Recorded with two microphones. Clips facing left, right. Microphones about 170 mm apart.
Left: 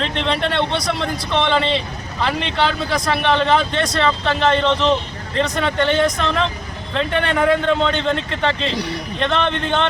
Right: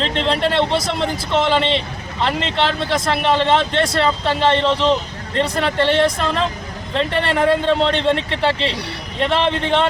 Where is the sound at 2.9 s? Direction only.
25° right (ahead or behind).